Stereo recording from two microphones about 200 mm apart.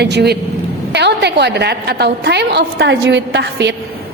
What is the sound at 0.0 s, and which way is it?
A woman's voice, 55° right (ahead or behind).